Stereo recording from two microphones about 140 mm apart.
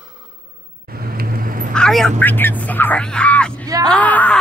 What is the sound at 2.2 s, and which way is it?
Speech, 15° left (ahead or behind).